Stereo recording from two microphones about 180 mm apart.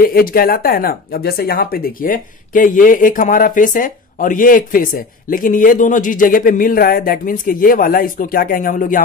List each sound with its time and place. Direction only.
0.0 s speech: 55° left (ahead or behind)